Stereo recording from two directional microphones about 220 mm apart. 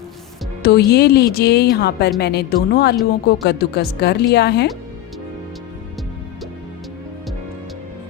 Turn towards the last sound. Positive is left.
turn(degrees=0)  # may be behind; listen again after turning